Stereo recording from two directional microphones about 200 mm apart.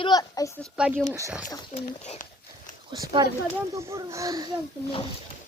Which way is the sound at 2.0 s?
35° left (ahead or behind).